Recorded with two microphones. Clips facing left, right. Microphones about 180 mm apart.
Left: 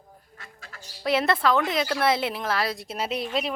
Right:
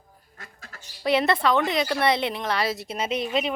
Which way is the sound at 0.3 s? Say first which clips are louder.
Right 2 dB; 45° right (ahead or behind).